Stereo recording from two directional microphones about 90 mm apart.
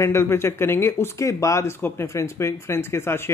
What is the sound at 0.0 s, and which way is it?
Speech, 30° left (ahead or behind).